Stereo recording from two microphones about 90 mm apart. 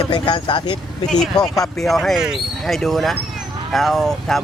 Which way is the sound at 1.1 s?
5° left (ahead or behind).